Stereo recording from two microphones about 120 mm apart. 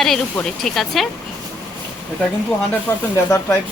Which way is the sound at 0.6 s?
Centre (ahead or behind).